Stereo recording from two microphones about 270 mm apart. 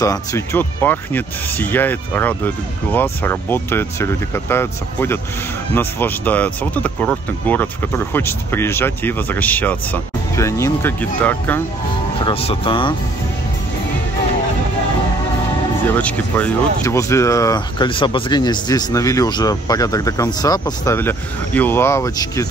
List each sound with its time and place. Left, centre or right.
0.0 s speech: centre
12.3 s speech: left
16.0 s speech: centre